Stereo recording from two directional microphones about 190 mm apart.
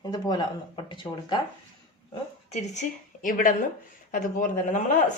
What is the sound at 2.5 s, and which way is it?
A woman's voice, 35° left (ahead or behind).